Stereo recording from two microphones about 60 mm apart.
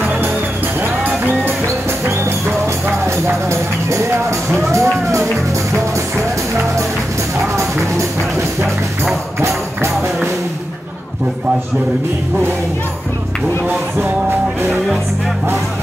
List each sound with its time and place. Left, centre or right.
1.0 s music: right
3.4 s music: right
7.5 s music: right